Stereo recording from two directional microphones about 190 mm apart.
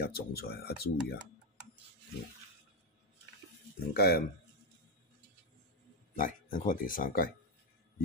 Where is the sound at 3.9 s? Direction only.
55° left (ahead or behind).